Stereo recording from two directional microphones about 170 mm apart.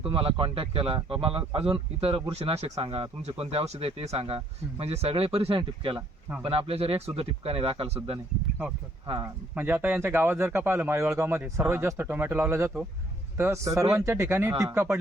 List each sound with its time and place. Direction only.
0.0 s speech: 30° right (ahead or behind)
9.6 s speech: 10° right (ahead or behind)